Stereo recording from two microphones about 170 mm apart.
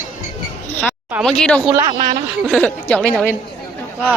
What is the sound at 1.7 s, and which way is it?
Speech, 30° right (ahead or behind).